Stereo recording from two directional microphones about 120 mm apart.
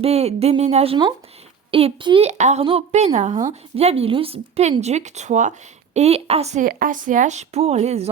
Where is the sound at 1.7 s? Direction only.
45° right (ahead or behind).